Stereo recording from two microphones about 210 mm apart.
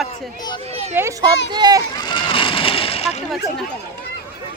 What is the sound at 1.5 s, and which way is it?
Speech, 20° right (ahead or behind).